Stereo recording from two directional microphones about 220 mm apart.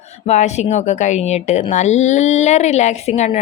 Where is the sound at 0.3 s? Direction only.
30° left (ahead or behind).